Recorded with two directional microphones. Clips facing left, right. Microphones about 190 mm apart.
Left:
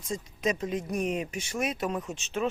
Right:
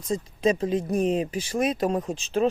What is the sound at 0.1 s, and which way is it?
Speech, 30° right (ahead or behind).